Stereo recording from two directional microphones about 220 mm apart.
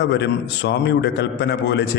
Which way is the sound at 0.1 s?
50° left (ahead or behind).